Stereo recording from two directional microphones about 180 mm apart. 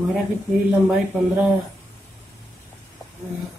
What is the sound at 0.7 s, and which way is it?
Speech, 10° right (ahead or behind).